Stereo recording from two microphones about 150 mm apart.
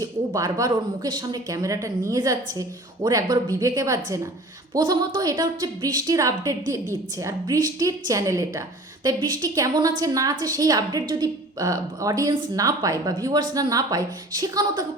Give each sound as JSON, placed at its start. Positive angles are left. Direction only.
{"t": 0.0, "sound": "speech", "side_deg": -25}